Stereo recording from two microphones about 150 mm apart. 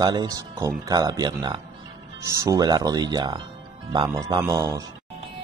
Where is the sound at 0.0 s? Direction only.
25° right (ahead or behind).